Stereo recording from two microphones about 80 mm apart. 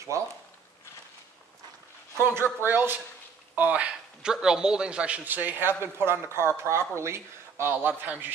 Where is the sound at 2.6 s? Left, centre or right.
Right.